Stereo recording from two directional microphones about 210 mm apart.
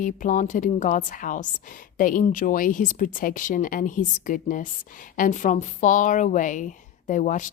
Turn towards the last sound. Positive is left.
turn(degrees=35)  # may be behind; listen again after turning